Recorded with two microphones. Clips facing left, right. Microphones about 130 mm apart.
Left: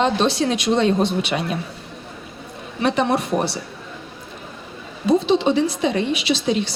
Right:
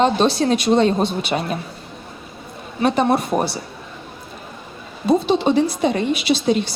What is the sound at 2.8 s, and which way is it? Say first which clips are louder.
Speech: right 2 dB; 45° right (ahead or behind).